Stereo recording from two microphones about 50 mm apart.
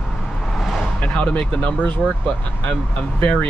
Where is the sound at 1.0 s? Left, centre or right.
Left.